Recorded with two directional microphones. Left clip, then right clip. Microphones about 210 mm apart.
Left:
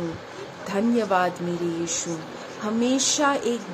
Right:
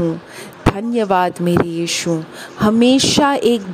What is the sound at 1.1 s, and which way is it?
Speech, 45° right (ahead or behind).